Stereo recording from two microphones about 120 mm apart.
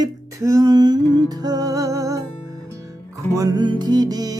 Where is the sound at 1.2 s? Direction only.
35° right (ahead or behind).